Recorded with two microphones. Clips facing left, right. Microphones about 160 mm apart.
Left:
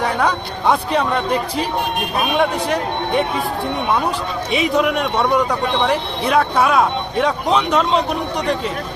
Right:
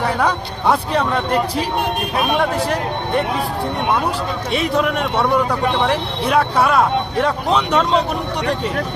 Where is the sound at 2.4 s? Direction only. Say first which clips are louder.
Left 1 dB; centre (ahead or behind).